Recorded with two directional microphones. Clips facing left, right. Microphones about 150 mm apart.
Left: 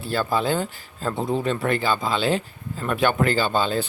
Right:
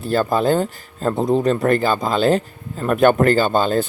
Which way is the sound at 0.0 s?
45° right (ahead or behind).